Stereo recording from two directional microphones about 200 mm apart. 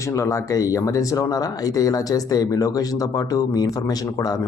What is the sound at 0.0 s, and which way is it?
Speech, 15° left (ahead or behind).